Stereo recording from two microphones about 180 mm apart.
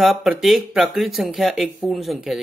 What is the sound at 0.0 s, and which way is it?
Speech, centre (ahead or behind).